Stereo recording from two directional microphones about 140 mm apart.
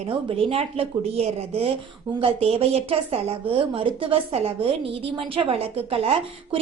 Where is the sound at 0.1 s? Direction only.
40° right (ahead or behind).